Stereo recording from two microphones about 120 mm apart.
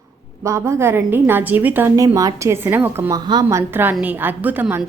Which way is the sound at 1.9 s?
30° right (ahead or behind).